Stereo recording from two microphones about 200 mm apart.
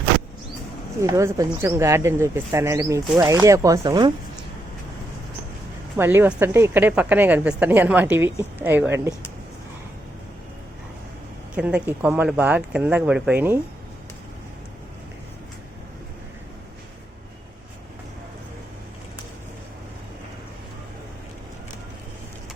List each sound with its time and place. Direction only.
1.0 s a woman's voice: 15° right (ahead or behind)
6.0 s a woman's voice: 10° right (ahead or behind)
11.5 s a woman's voice: 5° right (ahead or behind)